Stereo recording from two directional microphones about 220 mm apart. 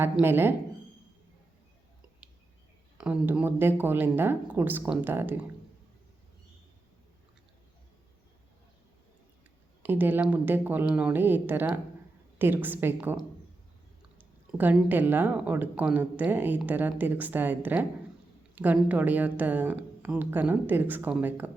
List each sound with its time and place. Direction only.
0.0 s speech: 10° right (ahead or behind)
3.0 s speech: 5° right (ahead or behind)
9.8 s speech: 10° right (ahead or behind)
14.2 s speech: 10° right (ahead or behind)